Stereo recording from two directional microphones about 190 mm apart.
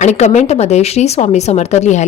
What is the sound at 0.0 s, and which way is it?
A woman's voice, 35° left (ahead or behind).